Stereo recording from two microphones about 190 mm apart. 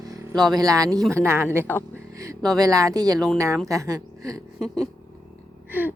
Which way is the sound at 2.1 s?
15° right (ahead or behind).